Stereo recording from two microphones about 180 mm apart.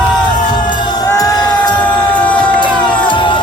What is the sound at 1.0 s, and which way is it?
Music, 20° left (ahead or behind).